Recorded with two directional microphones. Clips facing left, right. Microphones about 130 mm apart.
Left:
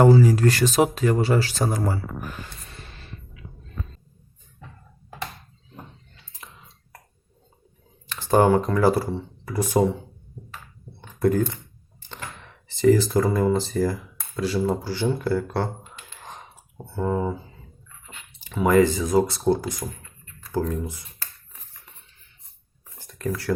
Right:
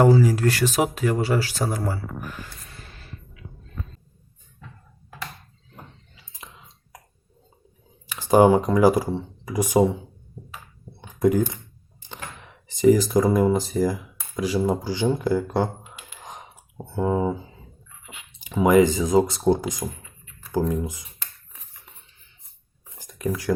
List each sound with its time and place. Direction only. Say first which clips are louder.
0.0 s speech: left 1 dB; 10° right (ahead or behind)
8.0 s speech: right 3 dB; 10° right (ahead or behind)
11.0 s keys jangling: right 1 dB; 15° right (ahead or behind)
12.0 s a sound: even; 15° right (ahead or behind)
13.7 s speech: right 1 dB; 10° right (ahead or behind)
23.0 s a sound: right 1 dB; 15° right (ahead or behind)